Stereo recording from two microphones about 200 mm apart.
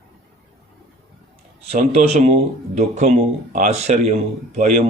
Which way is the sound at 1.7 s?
30° right (ahead or behind).